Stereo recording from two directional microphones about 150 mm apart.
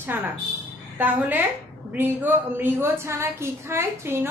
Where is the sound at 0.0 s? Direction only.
10° right (ahead or behind).